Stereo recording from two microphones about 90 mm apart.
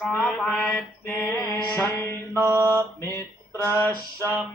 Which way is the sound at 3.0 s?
35° left (ahead or behind).